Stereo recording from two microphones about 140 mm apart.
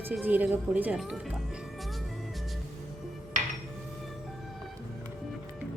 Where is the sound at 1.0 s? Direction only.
Centre (ahead or behind).